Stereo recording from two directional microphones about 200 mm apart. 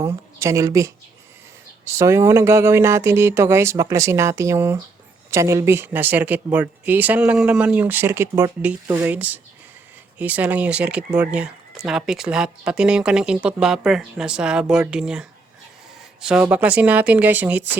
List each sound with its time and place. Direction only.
0.0 s speech: 15° right (ahead or behind)